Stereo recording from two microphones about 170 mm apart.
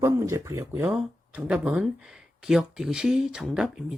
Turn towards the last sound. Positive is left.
turn(degrees=0)  # may be behind; listen again after turning